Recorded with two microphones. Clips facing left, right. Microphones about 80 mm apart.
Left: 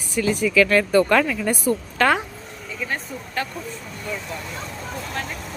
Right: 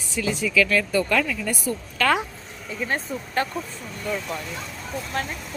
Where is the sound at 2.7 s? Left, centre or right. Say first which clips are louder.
Right 2 dB; right.